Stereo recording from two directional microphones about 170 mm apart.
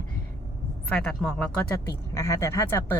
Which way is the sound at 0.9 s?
5° left (ahead or behind).